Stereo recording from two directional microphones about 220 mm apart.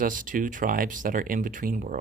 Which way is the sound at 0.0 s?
40° right (ahead or behind).